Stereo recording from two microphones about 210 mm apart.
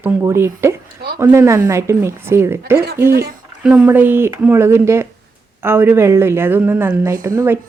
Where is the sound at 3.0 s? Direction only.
45° right (ahead or behind).